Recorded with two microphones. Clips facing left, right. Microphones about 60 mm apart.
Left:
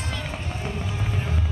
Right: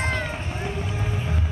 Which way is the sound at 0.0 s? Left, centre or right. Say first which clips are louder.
Right 5 dB; right.